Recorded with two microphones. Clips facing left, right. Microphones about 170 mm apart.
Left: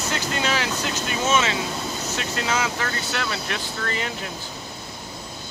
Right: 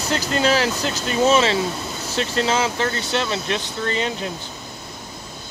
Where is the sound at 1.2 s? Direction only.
35° right (ahead or behind).